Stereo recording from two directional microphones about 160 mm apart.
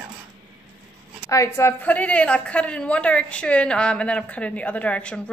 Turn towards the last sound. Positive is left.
turn(degrees=5)  # may be behind; listen again after turning